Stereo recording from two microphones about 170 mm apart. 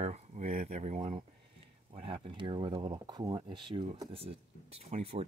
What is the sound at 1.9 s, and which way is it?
Speech, 30° right (ahead or behind).